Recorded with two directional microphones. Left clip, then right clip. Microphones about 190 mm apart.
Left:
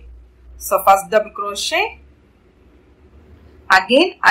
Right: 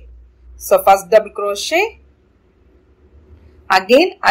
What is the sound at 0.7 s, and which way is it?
A woman's voice, 20° right (ahead or behind).